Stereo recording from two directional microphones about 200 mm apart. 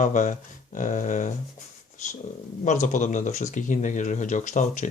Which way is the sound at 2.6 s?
40° left (ahead or behind).